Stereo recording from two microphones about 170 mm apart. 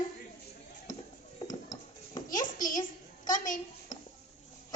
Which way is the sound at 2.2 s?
50° left (ahead or behind).